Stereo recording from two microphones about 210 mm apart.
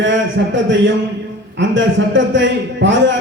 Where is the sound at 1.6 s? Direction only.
60° right (ahead or behind).